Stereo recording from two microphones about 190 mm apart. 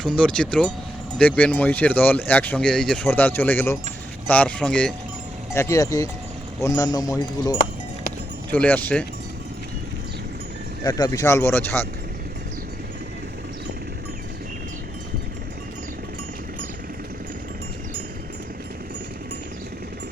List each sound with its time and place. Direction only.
0.2 s speech: 5° left (ahead or behind)
10.8 s speech: 20° left (ahead or behind)